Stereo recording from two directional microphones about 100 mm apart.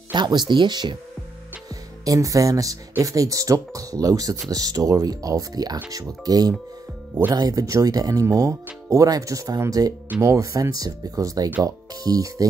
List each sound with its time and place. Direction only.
0.1 s speech: 50° right (ahead or behind)
2.0 s speech: 35° right (ahead or behind)